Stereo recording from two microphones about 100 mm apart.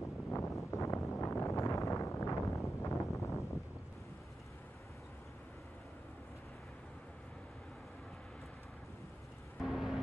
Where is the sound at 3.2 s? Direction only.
30° left (ahead or behind).